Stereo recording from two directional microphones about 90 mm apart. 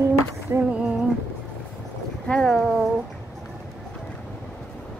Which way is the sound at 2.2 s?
10° left (ahead or behind).